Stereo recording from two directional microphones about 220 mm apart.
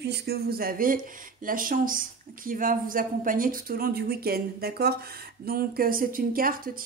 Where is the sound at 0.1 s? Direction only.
45° right (ahead or behind).